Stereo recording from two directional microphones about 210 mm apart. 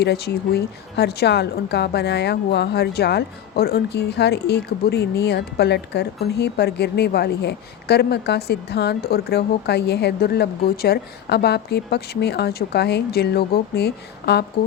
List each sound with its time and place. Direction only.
0.0 s a woman's voice: 50° left (ahead or behind)